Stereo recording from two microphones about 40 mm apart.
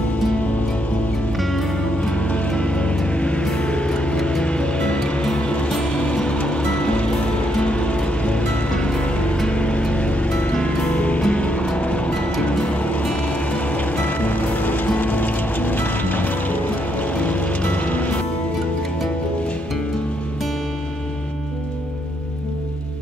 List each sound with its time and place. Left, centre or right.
1.4 s music: centre
2.2 s music: left